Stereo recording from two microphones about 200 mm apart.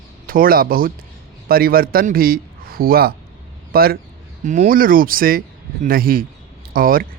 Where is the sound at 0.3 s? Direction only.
45° right (ahead or behind).